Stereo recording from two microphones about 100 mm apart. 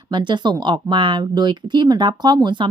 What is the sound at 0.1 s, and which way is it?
A woman's voice, 50° right (ahead or behind).